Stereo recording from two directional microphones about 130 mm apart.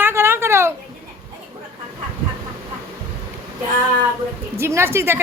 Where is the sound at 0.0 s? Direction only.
20° right (ahead or behind).